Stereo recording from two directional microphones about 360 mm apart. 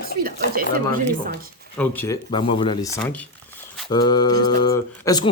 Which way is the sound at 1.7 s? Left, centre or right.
Centre.